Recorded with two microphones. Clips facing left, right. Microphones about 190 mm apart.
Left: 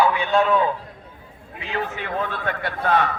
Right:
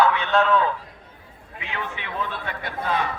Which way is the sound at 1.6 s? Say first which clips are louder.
Left 5 dB; 40° left (ahead or behind).